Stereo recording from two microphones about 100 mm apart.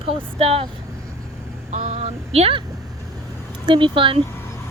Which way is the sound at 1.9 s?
90° right.